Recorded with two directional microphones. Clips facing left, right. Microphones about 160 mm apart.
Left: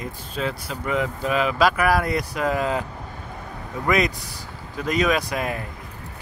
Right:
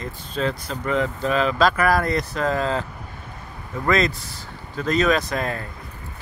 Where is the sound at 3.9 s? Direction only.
15° left (ahead or behind).